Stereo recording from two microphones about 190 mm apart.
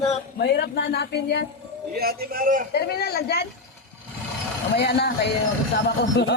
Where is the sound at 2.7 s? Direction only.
55° left (ahead or behind).